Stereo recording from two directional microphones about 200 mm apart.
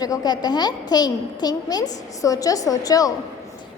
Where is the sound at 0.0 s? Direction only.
20° left (ahead or behind).